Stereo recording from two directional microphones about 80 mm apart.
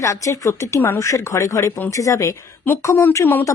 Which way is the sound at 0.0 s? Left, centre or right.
Left.